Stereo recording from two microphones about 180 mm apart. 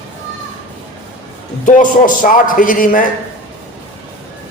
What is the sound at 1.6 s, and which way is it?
A man's voice, 45° left (ahead or behind).